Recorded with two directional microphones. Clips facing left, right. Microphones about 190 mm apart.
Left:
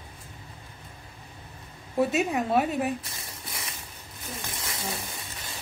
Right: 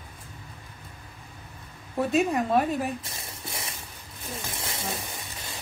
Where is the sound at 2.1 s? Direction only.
5° left (ahead or behind).